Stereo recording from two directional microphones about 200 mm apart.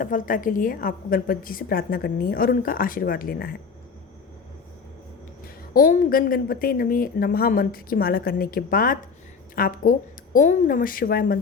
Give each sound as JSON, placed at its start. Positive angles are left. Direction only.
{"t": 0.0, "sound": "a woman's voice", "side_deg": 40}
{"t": 5.7, "sound": "a woman's voice", "side_deg": 45}